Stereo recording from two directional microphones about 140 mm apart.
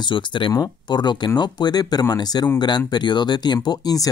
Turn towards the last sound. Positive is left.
turn(degrees=25)  # may be behind; listen again after turning